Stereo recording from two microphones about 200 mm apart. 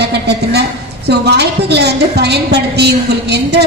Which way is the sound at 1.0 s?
55° right (ahead or behind).